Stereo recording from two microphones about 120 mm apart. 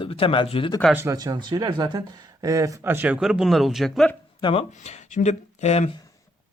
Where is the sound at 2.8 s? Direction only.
15° right (ahead or behind); by 4.1 s centre (ahead or behind).